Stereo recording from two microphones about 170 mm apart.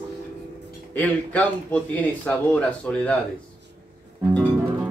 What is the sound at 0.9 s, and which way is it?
A man's voice, 10° left (ahead or behind).